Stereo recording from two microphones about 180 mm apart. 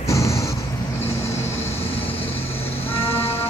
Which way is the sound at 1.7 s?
35° left (ahead or behind).